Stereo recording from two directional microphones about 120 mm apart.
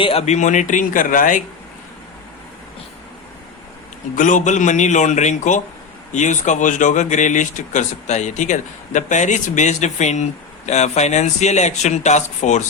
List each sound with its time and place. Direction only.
0.0 s speech: 55° left (ahead or behind); by 1.4 s 90° left
4.1 s speech: 90° left